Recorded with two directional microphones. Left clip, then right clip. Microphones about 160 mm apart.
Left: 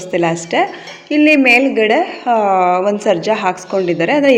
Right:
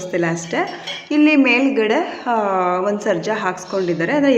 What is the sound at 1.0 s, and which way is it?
A woman's voice, 15° left (ahead or behind).